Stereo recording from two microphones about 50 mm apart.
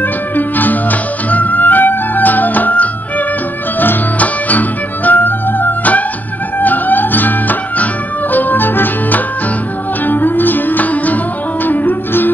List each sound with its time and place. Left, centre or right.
0.4 s music: left
4.2 s music: left